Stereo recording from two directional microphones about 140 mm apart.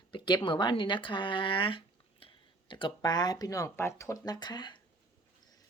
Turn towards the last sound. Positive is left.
turn(degrees=30)  # may be behind; listen again after turning